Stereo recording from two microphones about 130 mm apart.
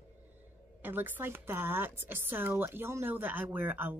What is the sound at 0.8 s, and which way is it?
Speech, 15° right (ahead or behind).